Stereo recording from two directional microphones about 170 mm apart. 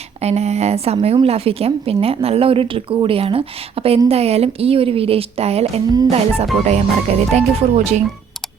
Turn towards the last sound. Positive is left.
turn(degrees=-40)  # may be behind; listen again after turning